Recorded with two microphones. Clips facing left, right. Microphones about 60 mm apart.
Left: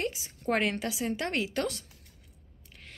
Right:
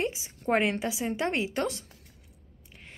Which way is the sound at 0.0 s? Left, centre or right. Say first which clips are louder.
Right 2 dB; right.